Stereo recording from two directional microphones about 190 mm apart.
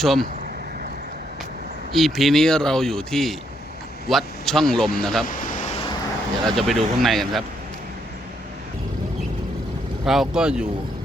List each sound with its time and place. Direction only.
0.0 s speech: centre (ahead or behind)
1.9 s speech: centre (ahead or behind)
5.2 s a sound: 45° left (ahead or behind)
6.4 s speech: centre (ahead or behind)
10.1 s speech: 5° right (ahead or behind)